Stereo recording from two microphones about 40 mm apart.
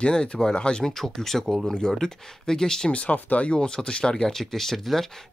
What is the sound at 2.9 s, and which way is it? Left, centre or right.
Speech, left.